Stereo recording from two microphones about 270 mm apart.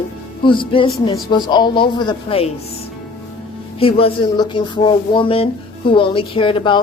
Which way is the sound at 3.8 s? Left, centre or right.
Left.